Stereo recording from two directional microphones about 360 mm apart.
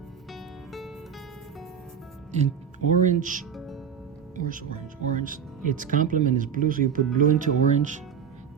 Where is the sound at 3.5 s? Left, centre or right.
Centre.